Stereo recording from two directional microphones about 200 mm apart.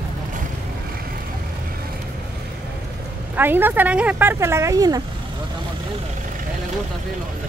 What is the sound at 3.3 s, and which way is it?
Speech, 10° right (ahead or behind).